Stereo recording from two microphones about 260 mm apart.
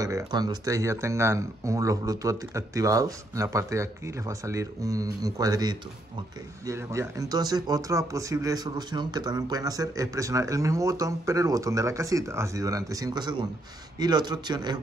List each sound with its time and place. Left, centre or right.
0.0 s speech: centre